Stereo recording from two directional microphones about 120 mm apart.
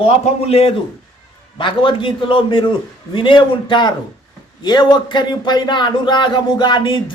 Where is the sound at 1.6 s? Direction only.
40° left (ahead or behind).